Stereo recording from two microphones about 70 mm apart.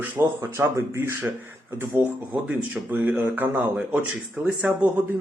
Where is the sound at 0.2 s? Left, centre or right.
Right.